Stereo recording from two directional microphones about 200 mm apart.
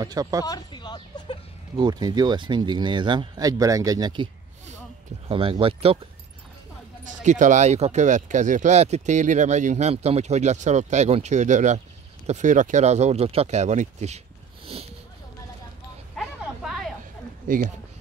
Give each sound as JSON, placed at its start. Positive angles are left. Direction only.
{"t": 0.0, "sound": "speech", "side_deg": -20}
{"t": 0.5, "sound": "a sound", "side_deg": 20}
{"t": 1.8, "sound": "speech", "side_deg": -20}
{"t": 5.3, "sound": "speech", "side_deg": -25}
{"t": 7.1, "sound": "speech", "side_deg": -40}
{"t": 16.2, "sound": "a sound", "side_deg": 0}
{"t": 17.5, "sound": "speech", "side_deg": -40}